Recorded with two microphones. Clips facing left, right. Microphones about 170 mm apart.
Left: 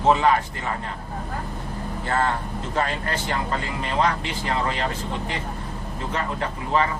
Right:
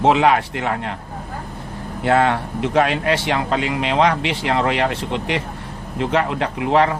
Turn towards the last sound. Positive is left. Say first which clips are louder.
# right 7 dB
turn(degrees=-70)  # may be behind; listen again after turning